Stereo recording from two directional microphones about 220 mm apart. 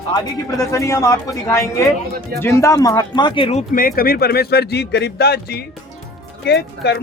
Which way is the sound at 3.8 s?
40° left (ahead or behind).